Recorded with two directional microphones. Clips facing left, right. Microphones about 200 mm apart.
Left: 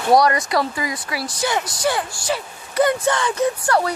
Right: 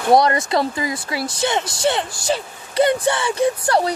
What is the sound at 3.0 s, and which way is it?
Speech, 10° right (ahead or behind).